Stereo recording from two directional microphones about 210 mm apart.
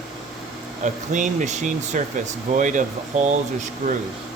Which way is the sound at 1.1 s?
35° right (ahead or behind).